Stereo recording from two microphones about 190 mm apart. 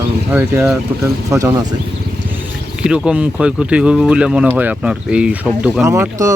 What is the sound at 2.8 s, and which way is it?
Speech, 5° right (ahead or behind).